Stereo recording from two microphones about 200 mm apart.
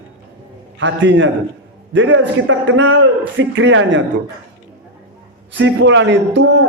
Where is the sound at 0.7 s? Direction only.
70° right (ahead or behind).